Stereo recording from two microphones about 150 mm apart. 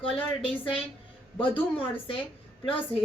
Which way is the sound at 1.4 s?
35° left (ahead or behind).